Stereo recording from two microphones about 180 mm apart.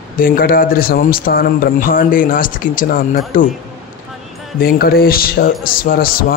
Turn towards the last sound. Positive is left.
turn(degrees=55)  # may be behind; listen again after turning